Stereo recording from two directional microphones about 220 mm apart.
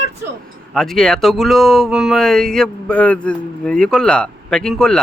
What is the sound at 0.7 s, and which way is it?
Speech, centre (ahead or behind).